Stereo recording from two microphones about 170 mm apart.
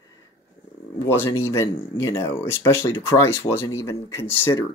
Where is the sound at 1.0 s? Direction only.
15° left (ahead or behind).